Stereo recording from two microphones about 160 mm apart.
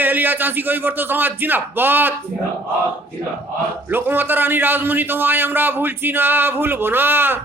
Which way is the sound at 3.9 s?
15° right (ahead or behind).